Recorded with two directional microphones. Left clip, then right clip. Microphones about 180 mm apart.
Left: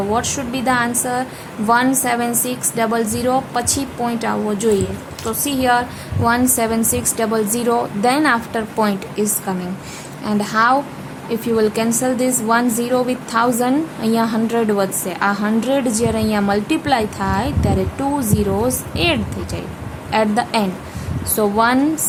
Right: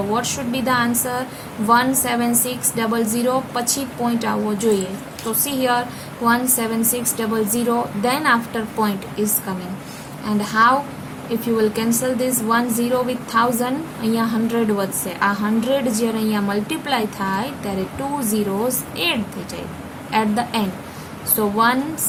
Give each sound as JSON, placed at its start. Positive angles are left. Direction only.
{"t": 0.1, "sound": "a woman's voice", "side_deg": 20}